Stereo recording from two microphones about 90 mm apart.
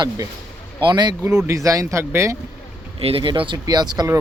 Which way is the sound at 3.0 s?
75° right (ahead or behind).